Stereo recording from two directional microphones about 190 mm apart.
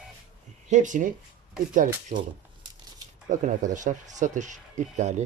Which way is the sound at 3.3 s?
40° right (ahead or behind).